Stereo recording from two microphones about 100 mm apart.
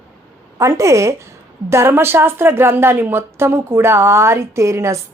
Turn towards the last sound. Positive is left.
turn(degrees=-30)  # may be behind; listen again after turning